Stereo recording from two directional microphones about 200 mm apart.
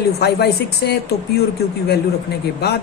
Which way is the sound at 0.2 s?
55° left (ahead or behind).